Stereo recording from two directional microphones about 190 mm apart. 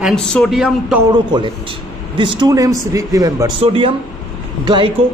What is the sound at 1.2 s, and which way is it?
A man's voice, 25° right (ahead or behind).